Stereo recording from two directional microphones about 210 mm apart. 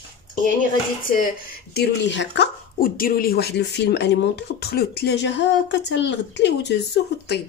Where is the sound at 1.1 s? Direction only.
45° left (ahead or behind).